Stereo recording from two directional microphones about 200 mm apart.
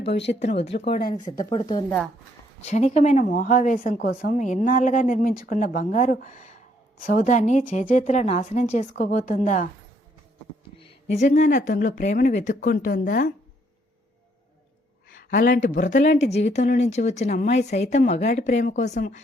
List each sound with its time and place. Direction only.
0.0 s speech: 60° left (ahead or behind)
1.5 s a woman's voice: 25° left (ahead or behind)
2.6 s a woman's voice: 35° left (ahead or behind)
10.8 s a woman's voice: 30° left (ahead or behind)
15.1 s a woman's voice: 45° left (ahead or behind)